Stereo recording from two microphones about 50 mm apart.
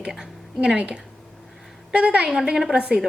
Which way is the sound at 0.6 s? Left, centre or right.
Right.